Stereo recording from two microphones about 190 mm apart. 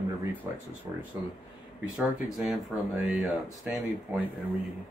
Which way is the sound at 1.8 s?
Centre (ahead or behind).